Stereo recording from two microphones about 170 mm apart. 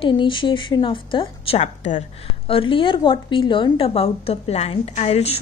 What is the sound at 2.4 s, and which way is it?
A woman's voice, 30° left (ahead or behind).